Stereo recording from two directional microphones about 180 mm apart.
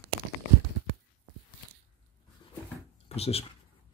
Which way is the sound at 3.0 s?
35° left (ahead or behind).